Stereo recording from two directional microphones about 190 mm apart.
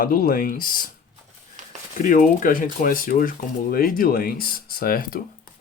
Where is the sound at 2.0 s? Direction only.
45° left (ahead or behind).